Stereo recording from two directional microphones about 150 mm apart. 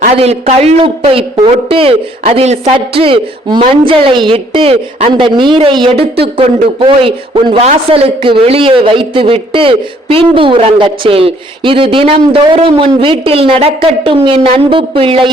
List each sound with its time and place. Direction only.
0.2 s a man's voice: 45° right (ahead or behind)